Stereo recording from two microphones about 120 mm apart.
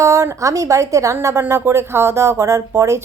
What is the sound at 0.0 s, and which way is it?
A woman's voice, 25° right (ahead or behind).